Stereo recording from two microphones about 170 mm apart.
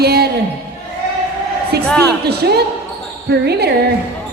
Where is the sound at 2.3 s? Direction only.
70° right (ahead or behind).